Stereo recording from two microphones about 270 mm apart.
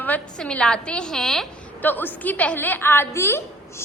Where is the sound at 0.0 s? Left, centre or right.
Centre.